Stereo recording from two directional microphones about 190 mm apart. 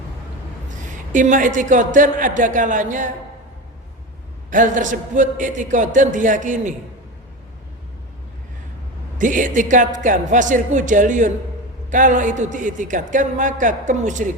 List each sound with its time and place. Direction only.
1.1 s speech: 40° right (ahead or behind)
4.5 s a man's voice: 40° right (ahead or behind)
9.1 s a man's voice: 45° right (ahead or behind)